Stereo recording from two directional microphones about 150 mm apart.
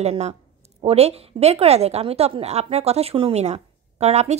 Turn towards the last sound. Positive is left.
turn(degrees=-45)  # may be behind; listen again after turning